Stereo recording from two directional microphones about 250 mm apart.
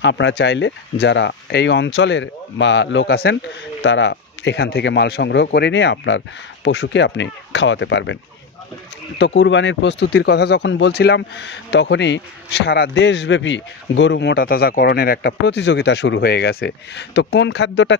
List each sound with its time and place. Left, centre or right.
0.0 s speech: left
9.2 s speech: left